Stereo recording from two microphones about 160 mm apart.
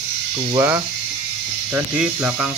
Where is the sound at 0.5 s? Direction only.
15° right (ahead or behind).